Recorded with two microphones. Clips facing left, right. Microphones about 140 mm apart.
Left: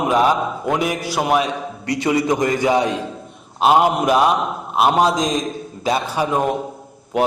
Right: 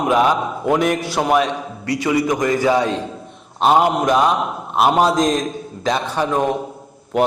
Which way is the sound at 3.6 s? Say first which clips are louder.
Even; 5° left (ahead or behind).